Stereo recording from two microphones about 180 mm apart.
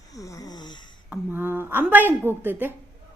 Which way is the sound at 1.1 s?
10° right (ahead or behind).